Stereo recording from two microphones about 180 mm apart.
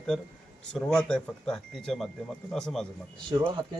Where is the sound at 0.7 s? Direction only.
5° left (ahead or behind).